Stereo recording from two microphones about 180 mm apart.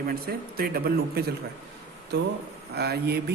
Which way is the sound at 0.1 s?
60° right (ahead or behind).